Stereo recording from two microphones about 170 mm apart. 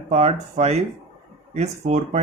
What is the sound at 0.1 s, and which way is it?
Speech, 40° right (ahead or behind).